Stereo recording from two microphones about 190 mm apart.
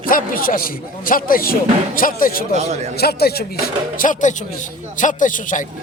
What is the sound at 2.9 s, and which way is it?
Speech, 55° left (ahead or behind).